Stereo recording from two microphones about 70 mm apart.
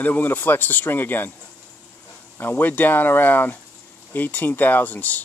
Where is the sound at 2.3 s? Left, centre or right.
Left.